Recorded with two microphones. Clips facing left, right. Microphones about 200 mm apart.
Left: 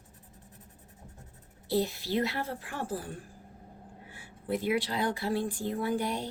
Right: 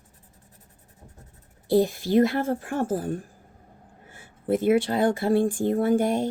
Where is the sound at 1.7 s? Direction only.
50° right (ahead or behind).